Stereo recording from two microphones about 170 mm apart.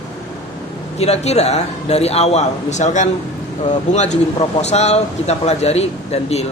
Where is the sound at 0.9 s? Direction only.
40° left (ahead or behind).